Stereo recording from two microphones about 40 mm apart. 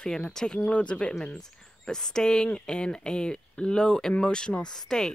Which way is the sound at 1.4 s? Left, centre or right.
Centre.